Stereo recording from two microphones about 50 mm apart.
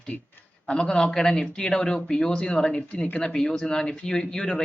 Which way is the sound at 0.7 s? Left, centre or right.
Centre.